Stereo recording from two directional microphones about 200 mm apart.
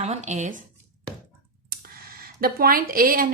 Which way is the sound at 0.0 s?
35° right (ahead or behind).